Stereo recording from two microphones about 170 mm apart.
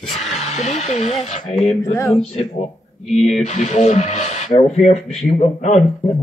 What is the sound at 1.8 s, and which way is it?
Speech, 15° left (ahead or behind).